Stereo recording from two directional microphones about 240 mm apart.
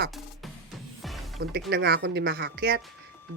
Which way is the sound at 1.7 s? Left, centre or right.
Right.